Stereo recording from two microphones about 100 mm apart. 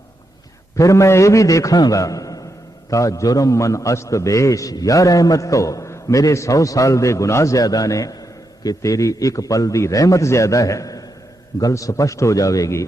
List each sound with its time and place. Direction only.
0.8 s a man's voice: 30° left (ahead or behind)